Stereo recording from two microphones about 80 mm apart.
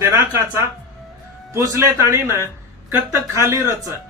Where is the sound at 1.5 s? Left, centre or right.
Right.